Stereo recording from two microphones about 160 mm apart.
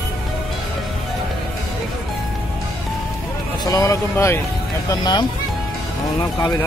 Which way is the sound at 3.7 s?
20° left (ahead or behind).